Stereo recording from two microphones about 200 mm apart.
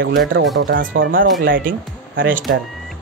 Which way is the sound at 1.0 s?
70° right (ahead or behind).